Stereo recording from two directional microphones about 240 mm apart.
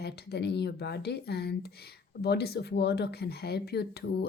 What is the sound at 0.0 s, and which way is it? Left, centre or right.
A woman's voice, left.